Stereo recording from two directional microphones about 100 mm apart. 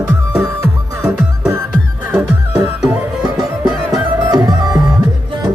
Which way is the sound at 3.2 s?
40° right (ahead or behind).